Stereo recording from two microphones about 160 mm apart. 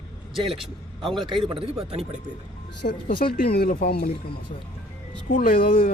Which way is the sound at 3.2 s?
75° left (ahead or behind).